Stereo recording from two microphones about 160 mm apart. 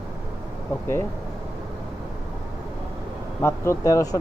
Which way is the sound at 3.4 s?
20° left (ahead or behind).